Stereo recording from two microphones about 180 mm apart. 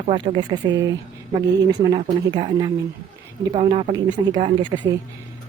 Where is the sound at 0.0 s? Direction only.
25° right (ahead or behind).